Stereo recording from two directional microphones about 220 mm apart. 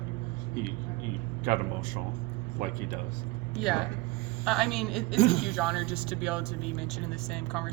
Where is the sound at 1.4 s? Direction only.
40° right (ahead or behind).